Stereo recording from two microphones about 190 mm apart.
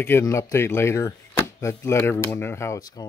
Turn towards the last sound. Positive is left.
turn(degrees=15)  # may be behind; listen again after turning